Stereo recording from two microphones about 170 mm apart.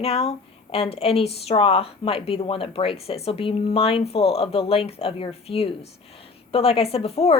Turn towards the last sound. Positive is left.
turn(degrees=35)  # may be behind; listen again after turning